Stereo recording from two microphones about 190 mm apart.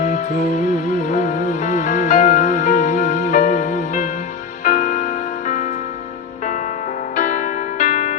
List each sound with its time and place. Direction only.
0.0 s music: 40° left (ahead or behind)
7.2 s music: 40° left (ahead or behind)